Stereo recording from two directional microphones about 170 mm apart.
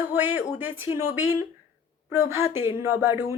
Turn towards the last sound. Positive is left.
turn(degrees=-15)  # may be behind; listen again after turning